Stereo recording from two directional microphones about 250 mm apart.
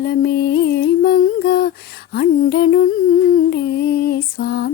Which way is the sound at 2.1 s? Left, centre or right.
Left.